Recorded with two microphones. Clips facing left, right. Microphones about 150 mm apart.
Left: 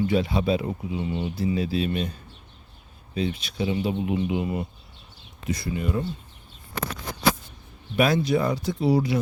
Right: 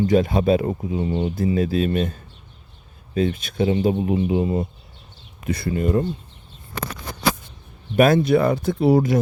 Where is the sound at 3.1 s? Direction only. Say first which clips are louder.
Right 6 dB; 50° right (ahead or behind).